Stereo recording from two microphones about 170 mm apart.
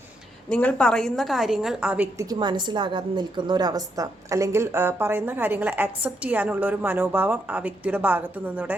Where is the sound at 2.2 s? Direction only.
25° right (ahead or behind).